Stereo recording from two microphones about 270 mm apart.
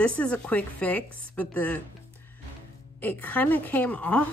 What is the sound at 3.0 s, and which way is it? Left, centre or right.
A woman's voice, centre.